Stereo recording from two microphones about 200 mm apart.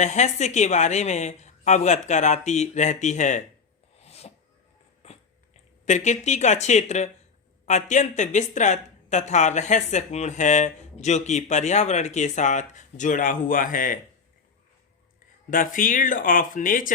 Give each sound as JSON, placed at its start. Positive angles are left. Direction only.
{"t": 0.0, "sound": "speech", "side_deg": 35}
{"t": 3.9, "sound": "a sound", "side_deg": 30}
{"t": 5.8, "sound": "speech", "side_deg": 35}
{"t": 15.4, "sound": "speech", "side_deg": 40}